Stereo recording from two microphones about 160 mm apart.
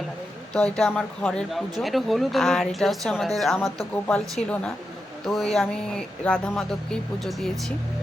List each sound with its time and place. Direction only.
0.5 s speech: 5° left (ahead or behind)
5.2 s speech: centre (ahead or behind)